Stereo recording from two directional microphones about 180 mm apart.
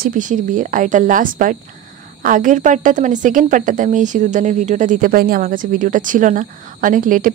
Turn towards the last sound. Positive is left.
turn(degrees=-50)  # may be behind; listen again after turning